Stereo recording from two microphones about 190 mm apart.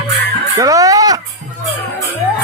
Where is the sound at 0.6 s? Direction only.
20° right (ahead or behind).